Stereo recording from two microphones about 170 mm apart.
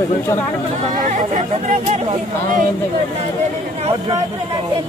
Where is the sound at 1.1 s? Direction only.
45° right (ahead or behind).